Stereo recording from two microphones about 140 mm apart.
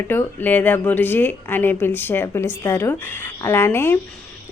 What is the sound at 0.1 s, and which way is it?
Speech, 15° left (ahead or behind).